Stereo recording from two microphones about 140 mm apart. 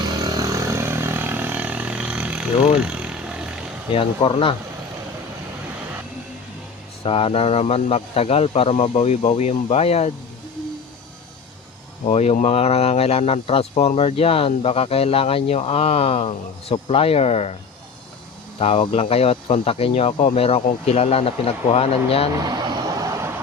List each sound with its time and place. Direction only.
0.2 s vehicle: 25° right (ahead or behind); by 3.5 s 10° right (ahead or behind)
3.9 s speech: 35° left (ahead or behind)
7.0 s speech: 40° left (ahead or behind)
12.0 s speech: 50° left (ahead or behind)
18.6 s speech: 45° left (ahead or behind)
22.4 s vehicle: 30° right (ahead or behind)